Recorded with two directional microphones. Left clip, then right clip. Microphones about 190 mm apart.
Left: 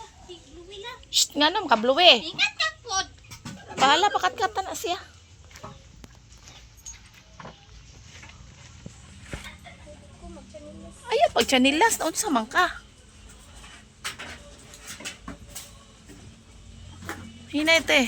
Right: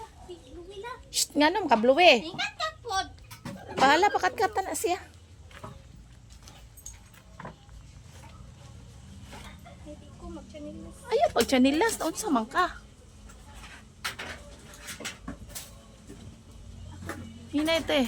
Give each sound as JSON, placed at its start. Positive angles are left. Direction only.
{"t": 0.8, "sound": "a woman's voice", "side_deg": -20}
{"t": 2.2, "sound": "a sound", "side_deg": -40}
{"t": 3.8, "sound": "speech", "side_deg": -30}
{"t": 5.6, "sound": "walk", "side_deg": 30}
{"t": 9.3, "sound": "a sound", "side_deg": 30}
{"t": 11.0, "sound": "speech", "side_deg": 5}
{"t": 17.5, "sound": "speech", "side_deg": 10}